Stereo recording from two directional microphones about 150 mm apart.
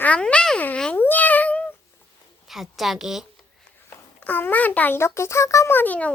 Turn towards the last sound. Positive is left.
turn(degrees=10)  # may be behind; listen again after turning